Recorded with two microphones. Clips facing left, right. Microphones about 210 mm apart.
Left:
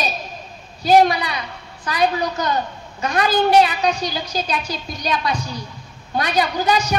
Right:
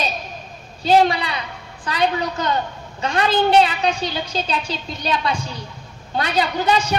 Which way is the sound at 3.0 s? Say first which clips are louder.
Even; 30° right (ahead or behind).